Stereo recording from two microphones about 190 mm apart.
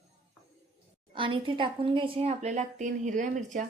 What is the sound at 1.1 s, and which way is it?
A woman's voice, 25° right (ahead or behind).